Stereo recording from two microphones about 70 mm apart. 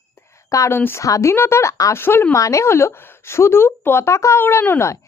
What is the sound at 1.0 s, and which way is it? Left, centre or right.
Speech, left.